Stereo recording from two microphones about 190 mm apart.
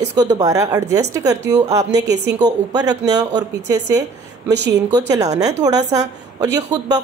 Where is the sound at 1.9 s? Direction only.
65° right (ahead or behind).